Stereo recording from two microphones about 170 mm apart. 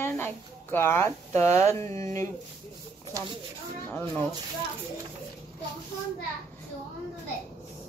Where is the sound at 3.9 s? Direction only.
10° left (ahead or behind).